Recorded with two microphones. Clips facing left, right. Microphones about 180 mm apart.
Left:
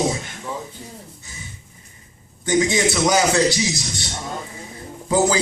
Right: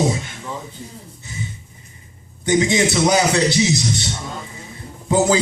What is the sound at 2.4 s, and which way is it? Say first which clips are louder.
A man's voice: right 2 dB; 20° right (ahead or behind).